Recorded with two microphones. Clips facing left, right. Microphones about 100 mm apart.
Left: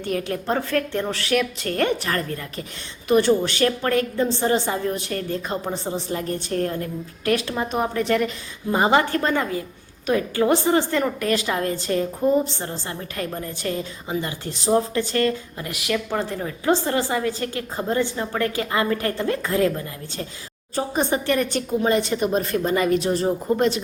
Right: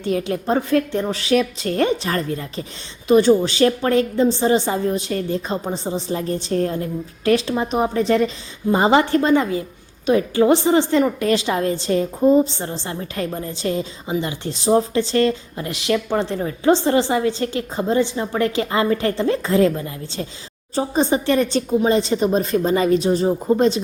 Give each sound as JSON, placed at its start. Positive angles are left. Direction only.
{"t": 0.0, "sound": "a woman's voice", "side_deg": -20}
{"t": 20.7, "sound": "a woman's voice", "side_deg": -20}